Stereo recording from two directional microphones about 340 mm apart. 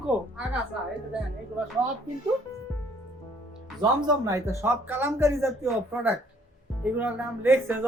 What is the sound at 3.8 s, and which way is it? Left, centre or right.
Speech, centre.